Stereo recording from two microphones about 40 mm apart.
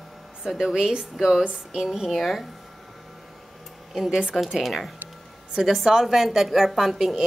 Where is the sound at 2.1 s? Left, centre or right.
Centre.